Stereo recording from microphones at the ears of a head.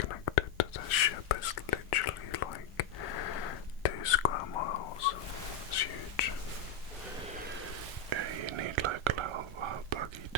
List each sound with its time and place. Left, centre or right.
0.0 s whispering: left
7.8 s whispering: right